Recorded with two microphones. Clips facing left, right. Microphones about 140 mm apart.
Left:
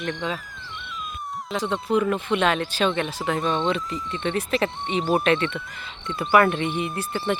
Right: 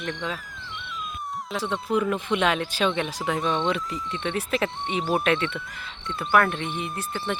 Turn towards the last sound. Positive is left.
turn(degrees=5)  # may be behind; listen again after turning